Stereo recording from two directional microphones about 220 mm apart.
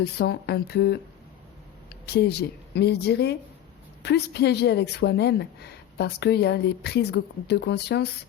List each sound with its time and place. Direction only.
0.0 s a woman's voice: 45° left (ahead or behind)
1.9 s a sound: 50° left (ahead or behind)
2.7 s a woman's voice: 50° left (ahead or behind)